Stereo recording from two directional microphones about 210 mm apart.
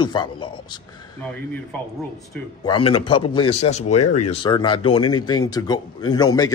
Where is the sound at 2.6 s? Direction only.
20° left (ahead or behind).